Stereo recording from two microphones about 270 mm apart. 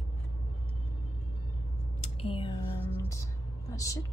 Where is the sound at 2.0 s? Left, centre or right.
Left.